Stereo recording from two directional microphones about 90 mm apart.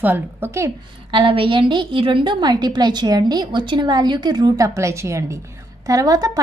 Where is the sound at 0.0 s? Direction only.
20° right (ahead or behind).